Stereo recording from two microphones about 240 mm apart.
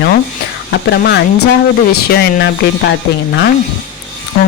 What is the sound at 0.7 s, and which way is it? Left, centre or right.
Speech, left.